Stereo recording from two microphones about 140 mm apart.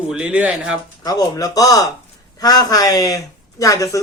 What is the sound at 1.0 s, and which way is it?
Speech, 25° left (ahead or behind).